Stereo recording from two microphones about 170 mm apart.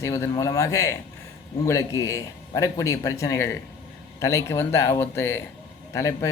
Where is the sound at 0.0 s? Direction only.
20° left (ahead or behind).